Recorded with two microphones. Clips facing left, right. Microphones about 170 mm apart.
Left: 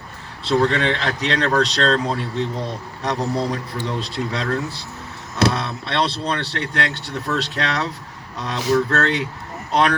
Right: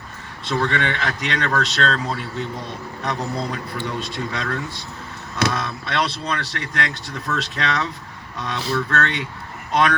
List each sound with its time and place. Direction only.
0.4 s speech: 35° left (ahead or behind)